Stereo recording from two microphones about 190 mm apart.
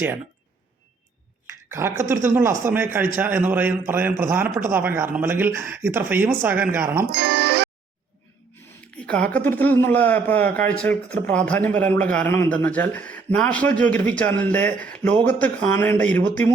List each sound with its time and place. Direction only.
1.7 s speech: 15° right (ahead or behind)
7.1 s speech: 55° right (ahead or behind)
9.0 s speech: 5° left (ahead or behind)